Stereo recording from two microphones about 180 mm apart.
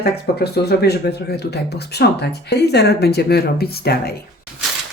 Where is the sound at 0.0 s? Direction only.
60° left (ahead or behind).